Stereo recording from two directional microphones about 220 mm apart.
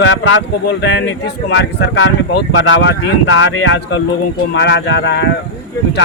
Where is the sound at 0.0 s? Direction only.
55° left (ahead or behind).